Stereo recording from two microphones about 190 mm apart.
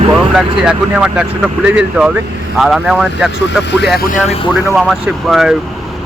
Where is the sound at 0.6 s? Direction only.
5° right (ahead or behind).